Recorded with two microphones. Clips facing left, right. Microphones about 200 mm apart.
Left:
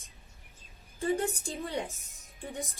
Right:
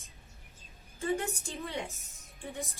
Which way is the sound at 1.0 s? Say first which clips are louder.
Left 3 dB; 35° left (ahead or behind).